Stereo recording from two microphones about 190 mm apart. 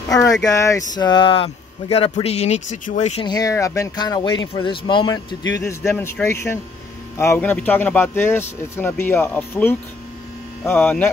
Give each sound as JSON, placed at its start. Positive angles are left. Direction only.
{"t": 0.1, "sound": "a sound", "side_deg": 20}
{"t": 0.5, "sound": "speech", "side_deg": 15}
{"t": 3.3, "sound": "speech", "side_deg": 20}